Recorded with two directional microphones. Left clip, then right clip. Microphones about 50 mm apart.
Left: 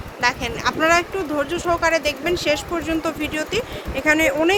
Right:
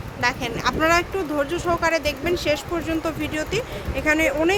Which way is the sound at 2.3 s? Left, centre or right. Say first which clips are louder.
Left 1 dB; centre.